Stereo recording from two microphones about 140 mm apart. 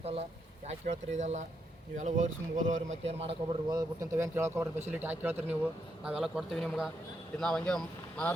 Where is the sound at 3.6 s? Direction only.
25° right (ahead or behind).